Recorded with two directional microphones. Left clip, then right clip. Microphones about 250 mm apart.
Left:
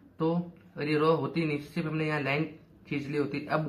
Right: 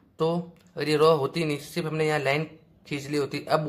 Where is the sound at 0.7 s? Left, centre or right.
Right.